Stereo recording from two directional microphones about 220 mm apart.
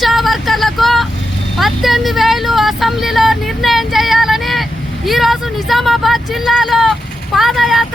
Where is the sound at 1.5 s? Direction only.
Centre (ahead or behind).